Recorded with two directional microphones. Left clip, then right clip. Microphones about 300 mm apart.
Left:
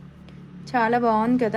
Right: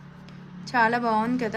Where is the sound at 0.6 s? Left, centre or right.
Centre.